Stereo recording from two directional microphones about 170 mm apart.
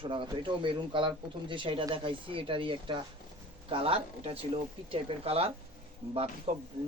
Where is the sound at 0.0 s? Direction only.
30° right (ahead or behind).